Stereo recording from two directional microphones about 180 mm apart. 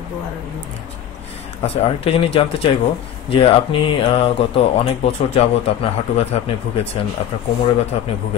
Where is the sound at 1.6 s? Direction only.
35° left (ahead or behind).